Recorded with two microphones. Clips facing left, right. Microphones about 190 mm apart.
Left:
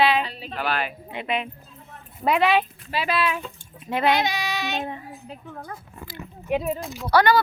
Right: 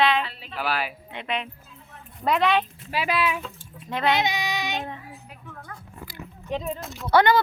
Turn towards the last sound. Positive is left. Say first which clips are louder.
# even
turn(degrees=-20)  # may be behind; listen again after turning